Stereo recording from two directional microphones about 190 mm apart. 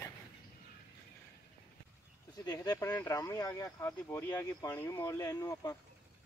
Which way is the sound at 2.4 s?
20° left (ahead or behind).